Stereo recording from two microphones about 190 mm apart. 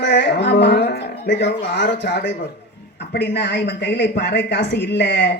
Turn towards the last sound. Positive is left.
turn(degrees=65)  # may be behind; listen again after turning